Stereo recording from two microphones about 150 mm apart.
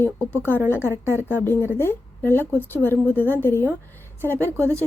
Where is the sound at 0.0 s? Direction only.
15° left (ahead or behind).